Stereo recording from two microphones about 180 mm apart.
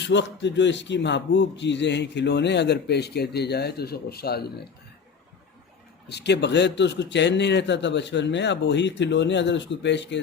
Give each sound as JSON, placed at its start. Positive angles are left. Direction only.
{"t": 0.0, "sound": "speech", "side_deg": 80}
{"t": 6.1, "sound": "speech", "side_deg": 70}